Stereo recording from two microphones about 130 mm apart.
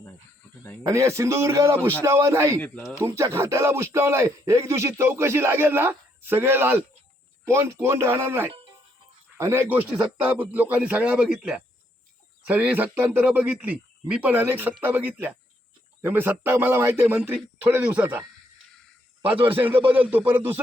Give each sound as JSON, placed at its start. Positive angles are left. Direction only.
{"t": 0.9, "sound": "speech", "side_deg": -25}
{"t": 2.6, "sound": "speech", "side_deg": 10}
{"t": 3.0, "sound": "a man's voice", "side_deg": -25}
{"t": 19.2, "sound": "a man's voice", "side_deg": -15}